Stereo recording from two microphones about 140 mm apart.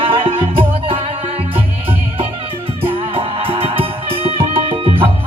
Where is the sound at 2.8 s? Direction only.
40° right (ahead or behind).